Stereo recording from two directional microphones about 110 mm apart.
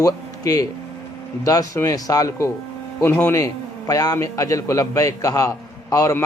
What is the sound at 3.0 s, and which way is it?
Speech, 15° left (ahead or behind).